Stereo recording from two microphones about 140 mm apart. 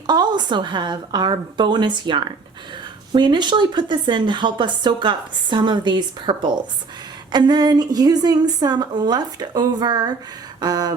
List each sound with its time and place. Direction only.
0.1 s a woman's voice: 30° right (ahead or behind)